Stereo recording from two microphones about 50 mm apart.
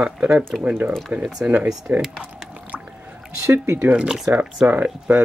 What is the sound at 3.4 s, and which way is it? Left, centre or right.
Speech, right.